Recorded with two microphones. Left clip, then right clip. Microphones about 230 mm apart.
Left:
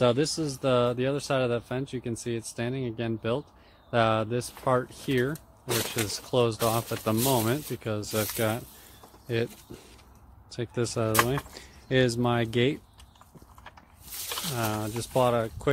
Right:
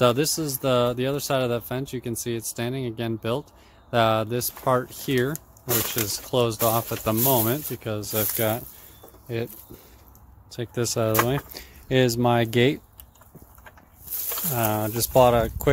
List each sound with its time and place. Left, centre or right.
0.0 s speech: centre
9.3 s speech: centre
10.5 s speech: centre
14.5 s speech: centre